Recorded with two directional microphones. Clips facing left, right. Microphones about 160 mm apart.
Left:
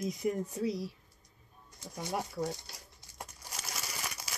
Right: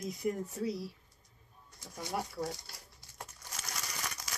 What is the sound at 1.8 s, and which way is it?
Speech, 20° left (ahead or behind).